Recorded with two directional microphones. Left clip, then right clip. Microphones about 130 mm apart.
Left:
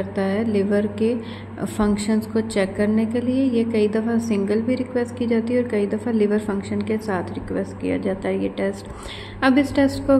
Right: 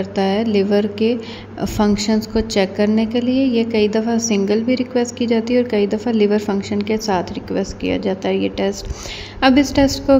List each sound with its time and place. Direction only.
0.1 s a woman's voice: 25° right (ahead or behind)